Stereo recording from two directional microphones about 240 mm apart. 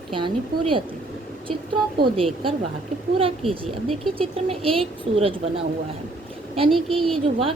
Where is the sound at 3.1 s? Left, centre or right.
Right.